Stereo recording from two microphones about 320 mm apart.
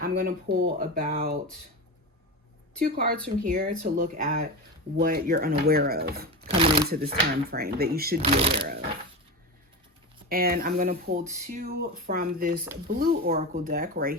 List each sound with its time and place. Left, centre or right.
0.0 s speech: right
2.7 s speech: right
6.5 s crumpling: centre
6.9 s speech: right
8.2 s speech: centre
10.2 s speech: right